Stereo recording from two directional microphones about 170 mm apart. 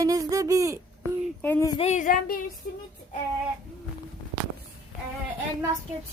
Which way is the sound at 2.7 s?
60° left (ahead or behind).